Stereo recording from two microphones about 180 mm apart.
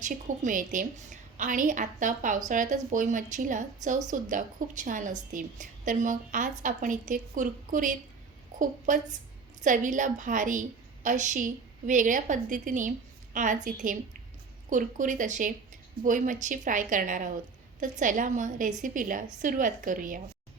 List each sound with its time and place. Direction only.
0.0 s a woman's voice: 45° right (ahead or behind)
8.5 s a sound: 45° right (ahead or behind)
8.9 s a woman's voice: 45° right (ahead or behind)